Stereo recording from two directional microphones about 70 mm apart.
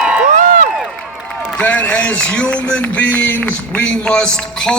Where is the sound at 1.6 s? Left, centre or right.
Left.